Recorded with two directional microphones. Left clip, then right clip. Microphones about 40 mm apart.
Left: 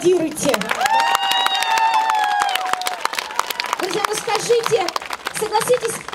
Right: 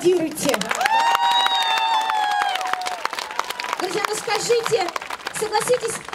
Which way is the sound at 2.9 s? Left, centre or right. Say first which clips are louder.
Left 3 dB; left.